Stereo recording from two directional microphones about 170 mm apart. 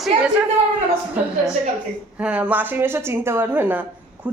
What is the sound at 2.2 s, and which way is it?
A woman's voice, 5° right (ahead or behind).